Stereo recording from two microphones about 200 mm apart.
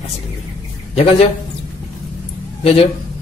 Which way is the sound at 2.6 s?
30° left (ahead or behind).